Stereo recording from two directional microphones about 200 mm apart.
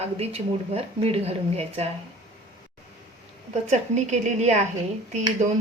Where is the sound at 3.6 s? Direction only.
35° right (ahead or behind).